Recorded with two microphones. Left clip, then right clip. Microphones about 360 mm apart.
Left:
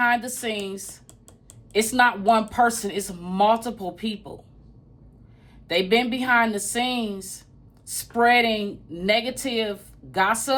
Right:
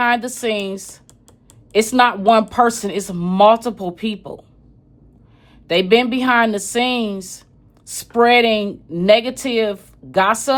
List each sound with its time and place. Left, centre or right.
0.0 s speech: right
1.7 s speech: right
5.6 s speech: centre